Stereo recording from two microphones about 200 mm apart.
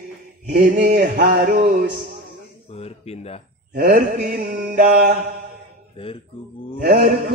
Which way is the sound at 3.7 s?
45° right (ahead or behind).